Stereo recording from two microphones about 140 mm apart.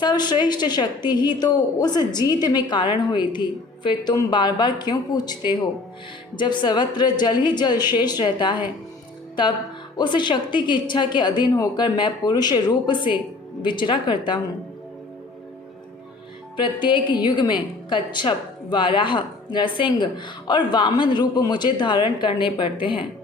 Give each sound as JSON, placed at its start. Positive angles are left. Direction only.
{"t": 0.0, "sound": "a woman's voice", "side_deg": 30}
{"t": 10.0, "sound": "a woman's voice", "side_deg": 35}
{"t": 16.6, "sound": "a woman's voice", "side_deg": 35}